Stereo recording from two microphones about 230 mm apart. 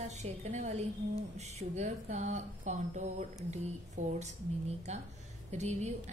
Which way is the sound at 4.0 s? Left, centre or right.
Right.